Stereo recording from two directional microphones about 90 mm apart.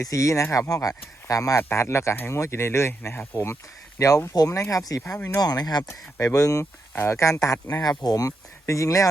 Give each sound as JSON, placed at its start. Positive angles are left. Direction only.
{"t": 0.0, "sound": "speech", "side_deg": 35}
{"t": 5.1, "sound": "speech", "side_deg": 25}
{"t": 5.4, "sound": "speech", "side_deg": 45}
{"t": 5.9, "sound": "speech", "side_deg": 35}